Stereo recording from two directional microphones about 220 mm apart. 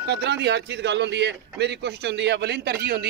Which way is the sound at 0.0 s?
50° right (ahead or behind).